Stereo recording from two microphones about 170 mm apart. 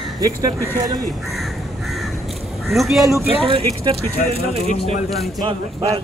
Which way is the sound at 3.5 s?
35° right (ahead or behind).